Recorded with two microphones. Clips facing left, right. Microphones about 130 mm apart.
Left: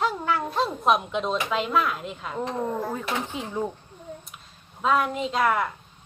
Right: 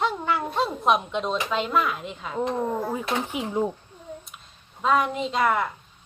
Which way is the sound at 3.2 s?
15° right (ahead or behind).